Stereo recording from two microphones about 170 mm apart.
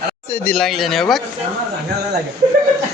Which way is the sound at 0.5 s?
Centre (ahead or behind).